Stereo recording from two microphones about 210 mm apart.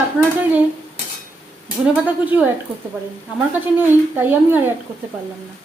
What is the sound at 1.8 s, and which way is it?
Speech, 5° right (ahead or behind).